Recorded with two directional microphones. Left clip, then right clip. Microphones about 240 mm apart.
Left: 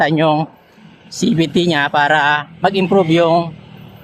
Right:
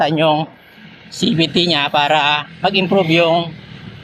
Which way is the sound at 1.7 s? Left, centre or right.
Left.